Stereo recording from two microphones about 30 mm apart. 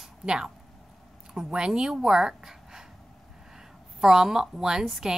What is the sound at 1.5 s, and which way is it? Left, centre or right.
A woman's voice, right.